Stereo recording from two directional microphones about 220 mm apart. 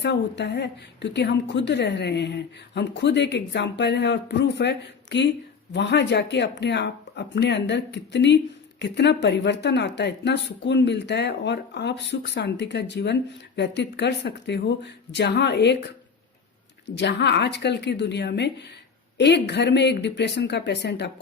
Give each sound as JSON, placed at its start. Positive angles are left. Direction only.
{"t": 0.0, "sound": "a woman's voice", "side_deg": 50}
{"t": 16.9, "sound": "a woman's voice", "side_deg": 50}